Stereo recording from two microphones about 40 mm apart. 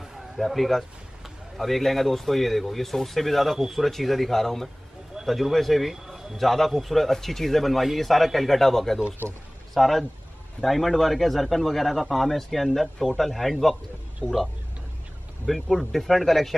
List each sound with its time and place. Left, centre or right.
0.4 s speech: centre
6.3 s speech: centre
14.2 s speech: left
15.4 s speech: centre